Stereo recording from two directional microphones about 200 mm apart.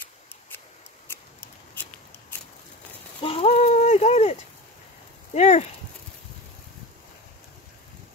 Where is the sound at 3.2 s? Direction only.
30° left (ahead or behind).